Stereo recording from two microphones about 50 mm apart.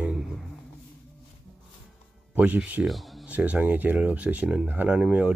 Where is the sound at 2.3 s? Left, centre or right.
Right.